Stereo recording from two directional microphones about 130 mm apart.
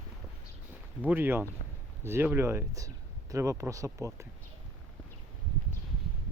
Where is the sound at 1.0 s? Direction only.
15° right (ahead or behind).